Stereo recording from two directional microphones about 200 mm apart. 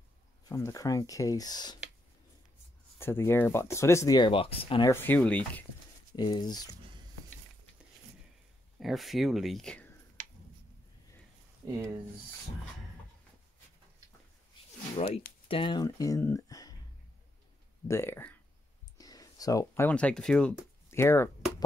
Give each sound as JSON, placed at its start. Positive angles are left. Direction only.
{"t": 0.5, "sound": "speech", "side_deg": 15}
{"t": 3.0, "sound": "speech", "side_deg": 10}
{"t": 4.9, "sound": "speech", "side_deg": 10}
{"t": 6.1, "sound": "speech", "side_deg": 20}
{"t": 8.7, "sound": "speech", "side_deg": 0}
{"t": 11.6, "sound": "speech", "side_deg": -15}
{"t": 15.4, "sound": "speech", "side_deg": 25}
{"t": 17.8, "sound": "speech", "side_deg": 10}